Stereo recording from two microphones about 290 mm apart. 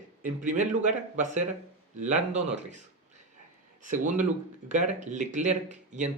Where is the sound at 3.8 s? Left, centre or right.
Right.